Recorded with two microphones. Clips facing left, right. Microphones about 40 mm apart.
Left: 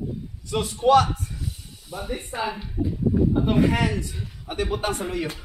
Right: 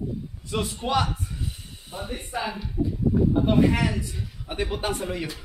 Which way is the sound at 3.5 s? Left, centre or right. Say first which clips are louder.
Even; centre.